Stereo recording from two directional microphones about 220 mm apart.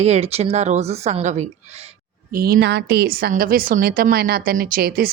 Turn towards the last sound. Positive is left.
turn(degrees=-40)  # may be behind; listen again after turning